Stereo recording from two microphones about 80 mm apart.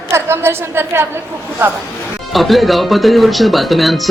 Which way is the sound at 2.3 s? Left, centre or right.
Centre.